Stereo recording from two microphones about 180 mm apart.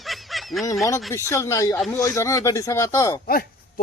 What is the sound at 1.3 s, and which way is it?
Speech, 15° left (ahead or behind).